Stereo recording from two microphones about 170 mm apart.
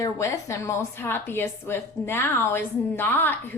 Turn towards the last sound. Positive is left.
turn(degrees=10)  # may be behind; listen again after turning